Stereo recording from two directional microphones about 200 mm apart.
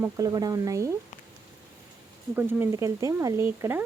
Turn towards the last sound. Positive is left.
turn(degrees=-10)  # may be behind; listen again after turning